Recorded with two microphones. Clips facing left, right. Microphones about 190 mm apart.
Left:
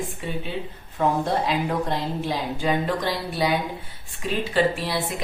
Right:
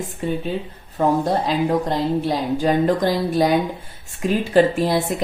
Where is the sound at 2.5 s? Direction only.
45° right (ahead or behind).